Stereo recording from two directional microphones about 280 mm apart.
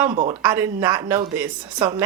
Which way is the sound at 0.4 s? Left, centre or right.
Centre.